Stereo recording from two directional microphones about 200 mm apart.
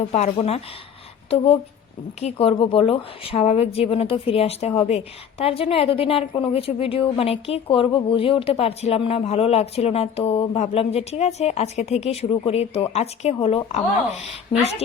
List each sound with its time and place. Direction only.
0.1 s speech: 30° left (ahead or behind)
2.2 s a woman's voice: 30° left (ahead or behind)